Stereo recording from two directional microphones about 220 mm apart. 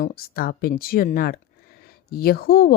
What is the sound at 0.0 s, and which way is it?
A woman's voice, 40° left (ahead or behind).